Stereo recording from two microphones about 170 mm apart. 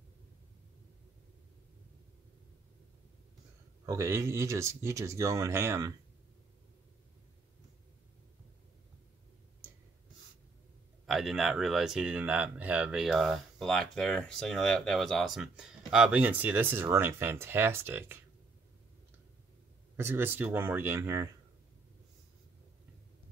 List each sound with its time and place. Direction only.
3.8 s speech: 15° right (ahead or behind)
11.1 s speech: centre (ahead or behind)
20.0 s speech: 15° right (ahead or behind)